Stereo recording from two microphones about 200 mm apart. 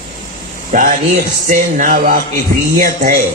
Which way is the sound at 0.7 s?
40° right (ahead or behind).